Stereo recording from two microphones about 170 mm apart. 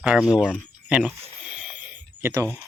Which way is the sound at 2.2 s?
15° right (ahead or behind).